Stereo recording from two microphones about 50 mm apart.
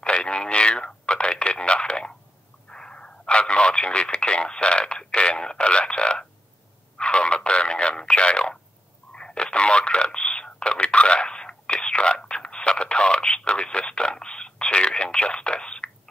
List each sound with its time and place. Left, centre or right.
0.0 s a sound: centre
2.7 s telephone: centre
4.2 s speech: centre
9.1 s telephone: centre